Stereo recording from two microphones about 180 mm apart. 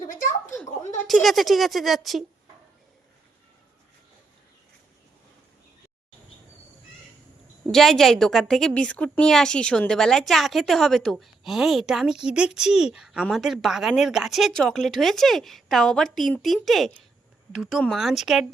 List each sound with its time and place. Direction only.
0.1 s a sound: 45° left (ahead or behind)
0.9 s a woman's voice: centre (ahead or behind)
7.7 s a woman's voice: centre (ahead or behind)